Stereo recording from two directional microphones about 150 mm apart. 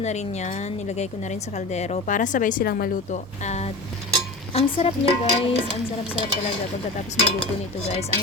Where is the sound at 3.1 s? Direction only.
50° left (ahead or behind).